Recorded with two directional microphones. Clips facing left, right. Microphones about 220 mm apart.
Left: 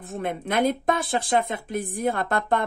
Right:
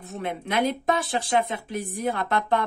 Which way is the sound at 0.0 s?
50° left (ahead or behind).